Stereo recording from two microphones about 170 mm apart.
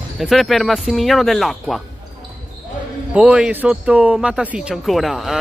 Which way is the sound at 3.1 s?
5° right (ahead or behind).